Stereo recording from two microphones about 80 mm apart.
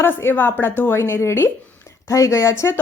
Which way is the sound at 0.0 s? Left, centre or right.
Left.